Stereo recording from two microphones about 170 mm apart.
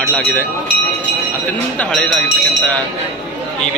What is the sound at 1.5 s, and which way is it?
Speech, 10° left (ahead or behind).